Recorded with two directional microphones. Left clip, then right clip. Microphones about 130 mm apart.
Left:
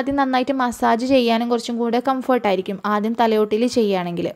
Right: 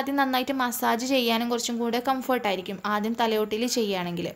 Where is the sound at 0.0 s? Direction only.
40° left (ahead or behind).